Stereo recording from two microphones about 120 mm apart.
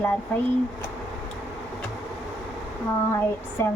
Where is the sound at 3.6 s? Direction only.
20° left (ahead or behind).